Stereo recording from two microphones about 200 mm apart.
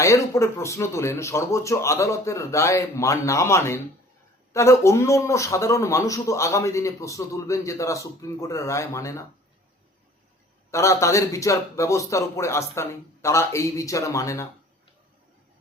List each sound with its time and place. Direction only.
0.0 s speech: 15° left (ahead or behind)
10.7 s speech: 15° left (ahead or behind)